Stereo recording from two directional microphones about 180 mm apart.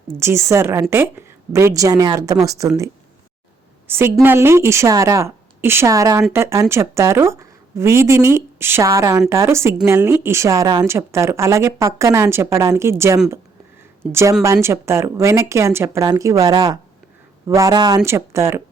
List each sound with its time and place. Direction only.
0.1 s a woman's voice: 15° right (ahead or behind)
3.8 s a woman's voice: 15° right (ahead or behind)